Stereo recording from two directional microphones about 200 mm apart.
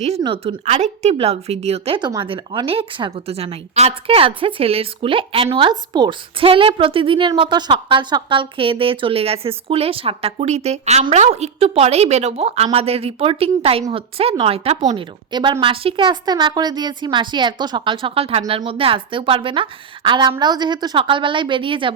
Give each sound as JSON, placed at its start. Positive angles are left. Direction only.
{"t": 0.2, "sound": "a woman's voice", "side_deg": -25}
{"t": 15.3, "sound": "a woman's voice", "side_deg": -20}